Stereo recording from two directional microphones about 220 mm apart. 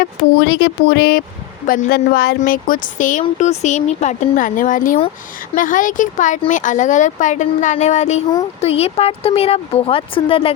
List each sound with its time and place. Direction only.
0.0 s speech: 50° left (ahead or behind); by 10.5 s 25° left (ahead or behind)